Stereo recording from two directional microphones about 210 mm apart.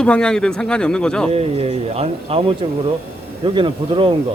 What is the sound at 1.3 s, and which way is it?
Speech, 30° right (ahead or behind).